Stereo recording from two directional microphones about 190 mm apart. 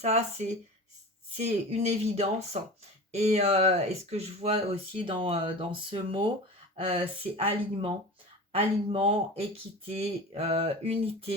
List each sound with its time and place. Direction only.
0.0 s speech: 35° right (ahead or behind)